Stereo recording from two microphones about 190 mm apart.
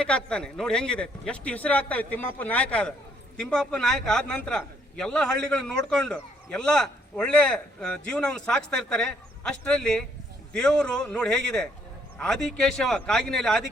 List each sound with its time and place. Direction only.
0.0 s a man's voice: 5° left (ahead or behind)